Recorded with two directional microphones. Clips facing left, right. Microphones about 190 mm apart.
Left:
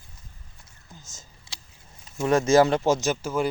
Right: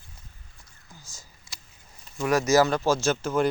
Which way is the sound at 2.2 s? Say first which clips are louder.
Left 2 dB; 25° left (ahead or behind).